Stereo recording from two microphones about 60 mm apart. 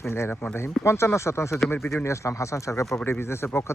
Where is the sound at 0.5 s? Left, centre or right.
Left.